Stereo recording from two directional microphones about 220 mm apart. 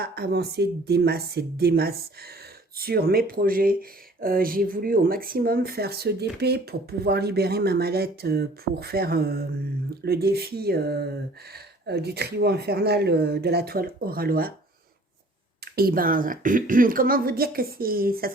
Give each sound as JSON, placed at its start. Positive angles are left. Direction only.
{"t": 0.0, "sound": "speech", "side_deg": -45}
{"t": 15.6, "sound": "speech", "side_deg": -45}